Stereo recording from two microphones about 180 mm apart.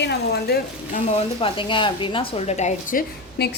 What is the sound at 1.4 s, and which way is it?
A woman's voice, 30° left (ahead or behind).